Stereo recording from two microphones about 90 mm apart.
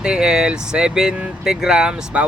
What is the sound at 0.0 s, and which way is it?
Speech, 10° right (ahead or behind).